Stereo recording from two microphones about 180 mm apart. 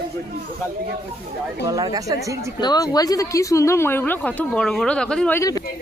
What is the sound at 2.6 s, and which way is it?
Speech, 20° left (ahead or behind).